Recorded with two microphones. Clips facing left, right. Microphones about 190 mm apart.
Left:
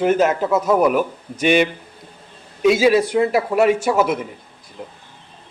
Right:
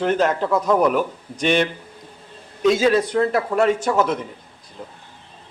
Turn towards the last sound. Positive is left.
turn(degrees=10)  # may be behind; listen again after turning